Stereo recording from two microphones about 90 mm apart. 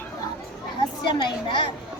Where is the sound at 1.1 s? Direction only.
65° left (ahead or behind).